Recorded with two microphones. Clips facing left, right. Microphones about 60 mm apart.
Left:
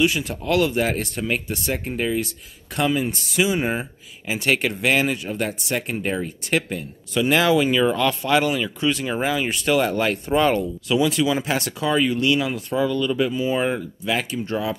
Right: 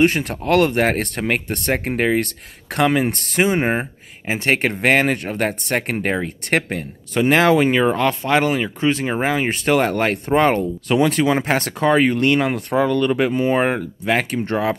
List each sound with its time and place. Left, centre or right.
0.0 s speech: right